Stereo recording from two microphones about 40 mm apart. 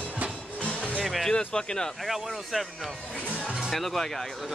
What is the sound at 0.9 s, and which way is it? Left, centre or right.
Music, centre.